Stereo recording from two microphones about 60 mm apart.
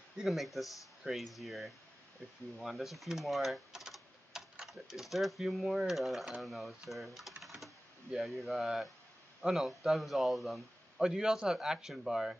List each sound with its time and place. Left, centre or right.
0.2 s a man's voice: centre